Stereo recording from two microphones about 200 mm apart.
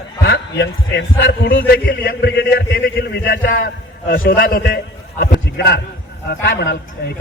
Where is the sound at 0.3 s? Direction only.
60° left (ahead or behind).